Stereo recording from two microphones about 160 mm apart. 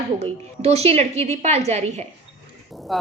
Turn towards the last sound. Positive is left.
turn(degrees=0)  # may be behind; listen again after turning